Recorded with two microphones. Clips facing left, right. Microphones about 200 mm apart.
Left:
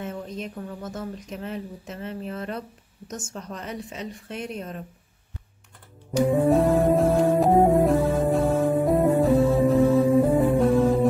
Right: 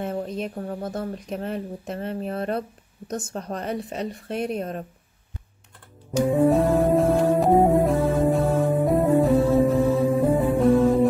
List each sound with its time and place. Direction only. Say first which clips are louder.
0.1 s speech: right 5 dB; 35° right (ahead or behind)
1.2 s speech: right 4 dB; 50° right (ahead or behind)
3.4 s a woman's voice: right 6 dB; 55° right (ahead or behind)
3.7 s speech: right 5 dB; 35° right (ahead or behind)
6.2 s music: right 1 dB; centre (ahead or behind)